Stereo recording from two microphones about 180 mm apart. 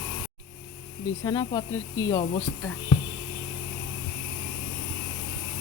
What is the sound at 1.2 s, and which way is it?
Speech, 20° left (ahead or behind).